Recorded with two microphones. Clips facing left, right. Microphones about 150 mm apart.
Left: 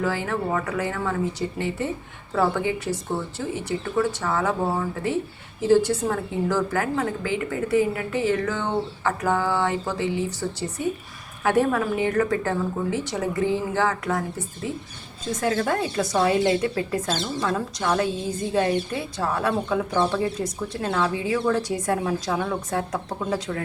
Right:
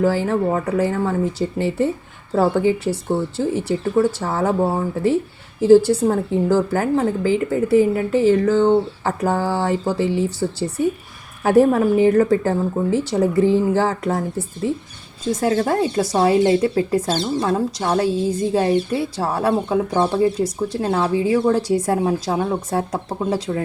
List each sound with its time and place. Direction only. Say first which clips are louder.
0.0 s speech: right 7 dB; 35° right (ahead or behind)
5.6 s speech: right 7 dB; 30° right (ahead or behind)